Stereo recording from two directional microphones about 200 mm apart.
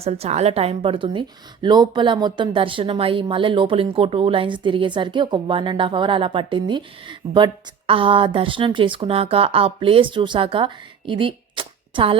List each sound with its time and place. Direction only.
0.0 s speech: 30° right (ahead or behind)